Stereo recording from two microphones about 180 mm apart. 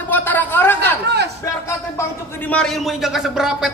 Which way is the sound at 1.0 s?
65° right (ahead or behind).